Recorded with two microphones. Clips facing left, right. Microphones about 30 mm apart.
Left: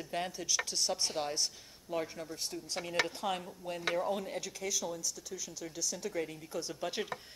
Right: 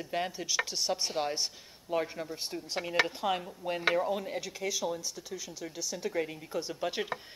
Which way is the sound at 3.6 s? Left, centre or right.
Right.